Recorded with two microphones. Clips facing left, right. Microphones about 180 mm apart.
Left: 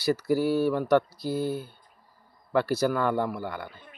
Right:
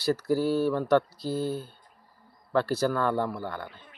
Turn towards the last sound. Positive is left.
turn(degrees=15)  # may be behind; listen again after turning